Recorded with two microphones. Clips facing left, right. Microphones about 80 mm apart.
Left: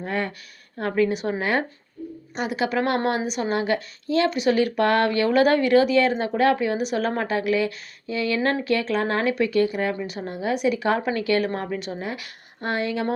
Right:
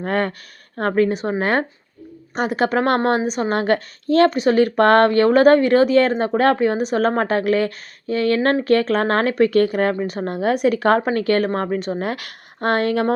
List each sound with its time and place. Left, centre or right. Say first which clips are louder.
0.0 s a woman's voice: right 6 dB; right
3.6 s a woman's voice: right 5 dB; right
9.9 s a woman's voice: right 6 dB; right
11.9 s speech: right 7 dB; right